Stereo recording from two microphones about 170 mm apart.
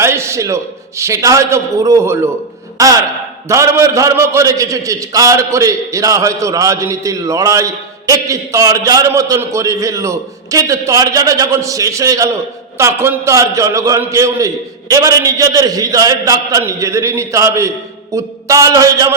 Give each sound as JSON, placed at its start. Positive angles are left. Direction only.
{"t": 0.0, "sound": "a man's voice", "side_deg": -15}